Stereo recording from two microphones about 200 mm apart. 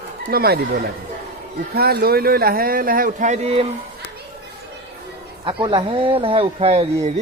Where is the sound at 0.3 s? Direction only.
50° right (ahead or behind); by 3.7 s 30° right (ahead or behind).